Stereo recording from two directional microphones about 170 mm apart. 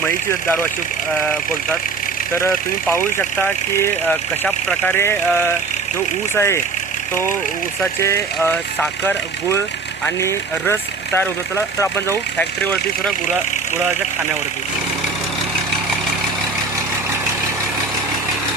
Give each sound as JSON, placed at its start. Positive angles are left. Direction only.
{"t": 2.5, "sound": "speech", "side_deg": 10}
{"t": 8.0, "sound": "speech", "side_deg": 15}